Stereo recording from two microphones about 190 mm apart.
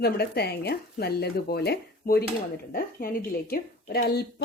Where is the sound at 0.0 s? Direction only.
60° left (ahead or behind).